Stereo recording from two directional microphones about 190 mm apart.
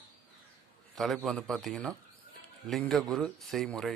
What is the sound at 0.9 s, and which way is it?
Speech, centre (ahead or behind).